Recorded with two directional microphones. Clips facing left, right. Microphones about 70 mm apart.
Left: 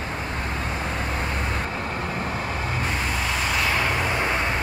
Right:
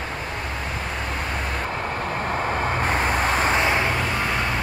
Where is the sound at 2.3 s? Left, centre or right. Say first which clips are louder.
Right 4 dB; right.